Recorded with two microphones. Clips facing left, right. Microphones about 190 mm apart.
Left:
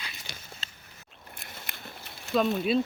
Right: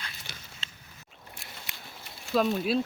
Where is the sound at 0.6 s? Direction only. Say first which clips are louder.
Even; 40° left (ahead or behind).